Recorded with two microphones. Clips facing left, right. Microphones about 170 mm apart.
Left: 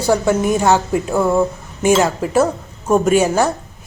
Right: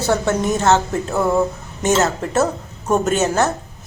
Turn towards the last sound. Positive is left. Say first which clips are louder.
# left 3 dB
turn(degrees=10)  # may be behind; listen again after turning